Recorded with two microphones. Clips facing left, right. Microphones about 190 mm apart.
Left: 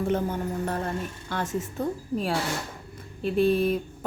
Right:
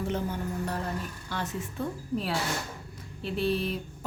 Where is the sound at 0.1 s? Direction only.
50° left (ahead or behind).